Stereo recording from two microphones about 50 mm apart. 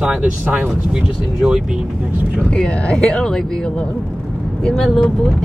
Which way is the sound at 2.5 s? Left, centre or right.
Centre.